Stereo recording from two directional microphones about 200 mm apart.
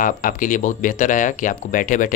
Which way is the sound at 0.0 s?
40° left (ahead or behind).